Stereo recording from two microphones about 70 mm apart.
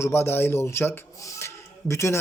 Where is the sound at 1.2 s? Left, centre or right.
Left.